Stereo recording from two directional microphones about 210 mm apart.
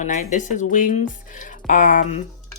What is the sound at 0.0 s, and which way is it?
Speech, 35° left (ahead or behind).